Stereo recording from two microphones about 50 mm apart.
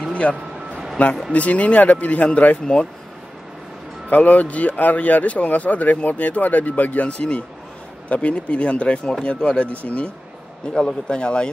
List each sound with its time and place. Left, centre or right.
0.1 s a sound: left
1.0 s speech: left
4.1 s speech: left
7.1 s speech: left